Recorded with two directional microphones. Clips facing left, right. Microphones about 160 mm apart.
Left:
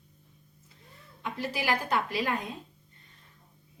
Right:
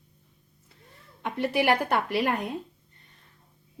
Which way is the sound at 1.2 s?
65° right (ahead or behind).